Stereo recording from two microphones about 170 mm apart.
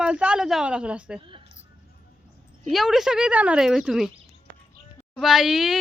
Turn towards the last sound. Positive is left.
turn(degrees=0)  # may be behind; listen again after turning